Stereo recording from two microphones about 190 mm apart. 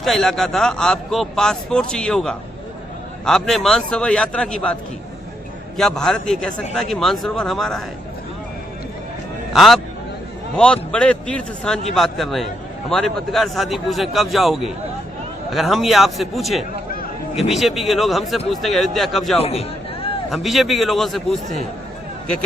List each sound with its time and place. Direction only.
0.0 s a man's voice: centre (ahead or behind)
9.5 s a man's voice: centre (ahead or behind)
19.4 s a sound: 30° left (ahead or behind)
20.3 s a man's voice: centre (ahead or behind)